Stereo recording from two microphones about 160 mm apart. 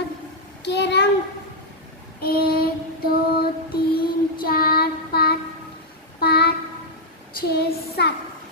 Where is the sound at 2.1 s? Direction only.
70° left (ahead or behind).